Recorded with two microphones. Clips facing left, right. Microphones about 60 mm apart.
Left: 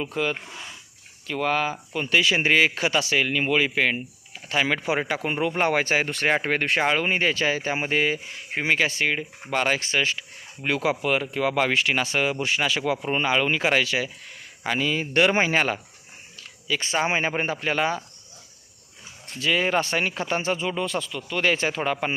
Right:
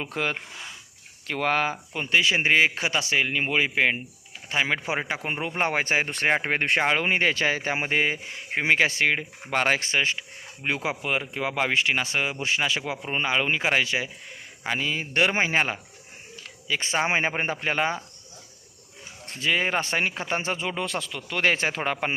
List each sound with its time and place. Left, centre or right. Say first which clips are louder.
0.0 s speech: left 2 dB; right
2.0 s speech: left 1 dB; centre
6.7 s speech: right 1 dB; right
10.6 s speech: left 4 dB; centre
13.0 s speech: left 3 dB; centre
13.2 s speech: left 1 dB; centre
16.6 s speech: left 1 dB; right
19.5 s speech: left 2 dB; right
20.7 s speech: left 2 dB; right